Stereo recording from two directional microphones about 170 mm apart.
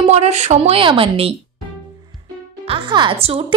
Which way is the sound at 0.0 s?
40° right (ahead or behind).